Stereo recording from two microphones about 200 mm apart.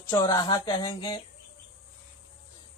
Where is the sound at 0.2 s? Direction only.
20° left (ahead or behind).